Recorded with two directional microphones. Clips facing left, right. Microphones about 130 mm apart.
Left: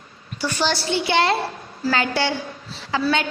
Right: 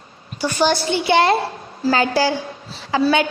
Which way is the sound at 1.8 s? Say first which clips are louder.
Right 4 dB; 35° right (ahead or behind).